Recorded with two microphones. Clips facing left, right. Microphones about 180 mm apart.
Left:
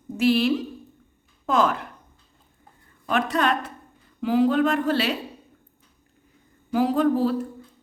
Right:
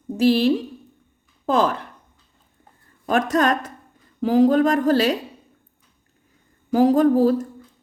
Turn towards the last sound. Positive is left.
turn(degrees=-40)  # may be behind; listen again after turning